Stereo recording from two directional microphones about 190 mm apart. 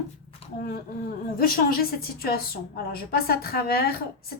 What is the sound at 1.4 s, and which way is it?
A woman's voice, 50° left (ahead or behind).